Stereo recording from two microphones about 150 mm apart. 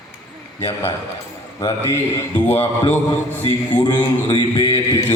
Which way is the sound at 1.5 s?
25° left (ahead or behind).